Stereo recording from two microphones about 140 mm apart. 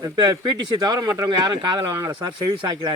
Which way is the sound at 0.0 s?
30° right (ahead or behind).